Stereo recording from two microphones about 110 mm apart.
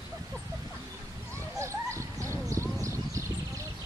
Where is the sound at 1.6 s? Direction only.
25° right (ahead or behind).